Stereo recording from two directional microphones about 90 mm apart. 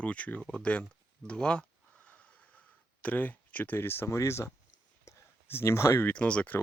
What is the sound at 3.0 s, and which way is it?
Speech, 20° left (ahead or behind).